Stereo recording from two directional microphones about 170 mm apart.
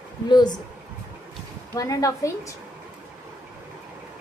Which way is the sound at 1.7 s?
20° left (ahead or behind).